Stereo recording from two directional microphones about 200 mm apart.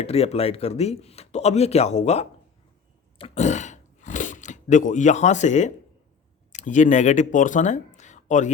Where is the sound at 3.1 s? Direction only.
30° left (ahead or behind).